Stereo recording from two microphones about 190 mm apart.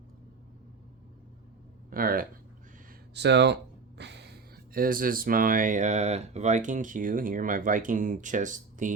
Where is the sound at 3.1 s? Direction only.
65° right (ahead or behind).